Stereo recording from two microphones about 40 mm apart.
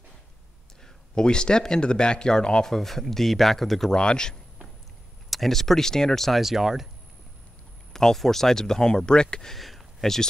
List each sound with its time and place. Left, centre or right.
1.1 s speech: left
2.7 s speech: centre
3.9 s speech: left
5.3 s speech: centre
6.4 s speech: centre
7.9 s speech: centre
9.5 s a sound: centre